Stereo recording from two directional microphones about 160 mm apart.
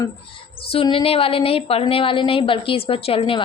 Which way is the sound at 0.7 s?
35° left (ahead or behind).